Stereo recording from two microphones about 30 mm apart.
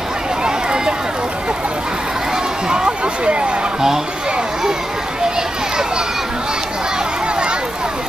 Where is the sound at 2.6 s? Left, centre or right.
Right.